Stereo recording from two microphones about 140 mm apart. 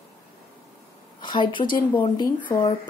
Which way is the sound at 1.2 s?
35° left (ahead or behind).